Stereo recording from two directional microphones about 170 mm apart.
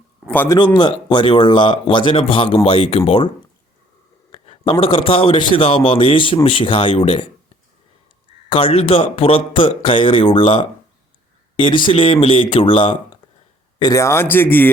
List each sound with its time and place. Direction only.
0.3 s speech: 10° left (ahead or behind)
0.5 s a man's voice: 25° left (ahead or behind)
4.3 s a man's voice: 30° left (ahead or behind)
8.4 s a man's voice: 30° left (ahead or behind); by 14.7 s 10° left (ahead or behind)